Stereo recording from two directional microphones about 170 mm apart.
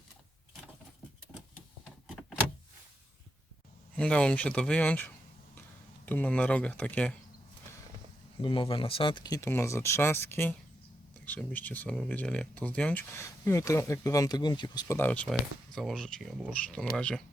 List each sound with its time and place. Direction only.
3.9 s speech: 5° left (ahead or behind)
8.4 s speech: 30° left (ahead or behind)
14.9 s speech: 10° left (ahead or behind)